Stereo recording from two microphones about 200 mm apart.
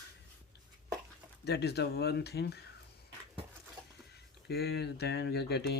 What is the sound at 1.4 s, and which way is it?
Speech, 55° left (ahead or behind).